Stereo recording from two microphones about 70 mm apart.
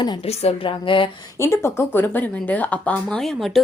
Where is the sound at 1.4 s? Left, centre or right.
Left.